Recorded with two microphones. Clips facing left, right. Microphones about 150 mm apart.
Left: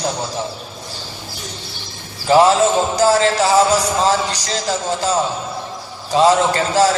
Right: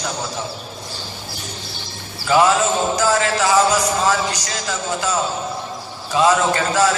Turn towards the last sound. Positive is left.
turn(degrees=35)  # may be behind; listen again after turning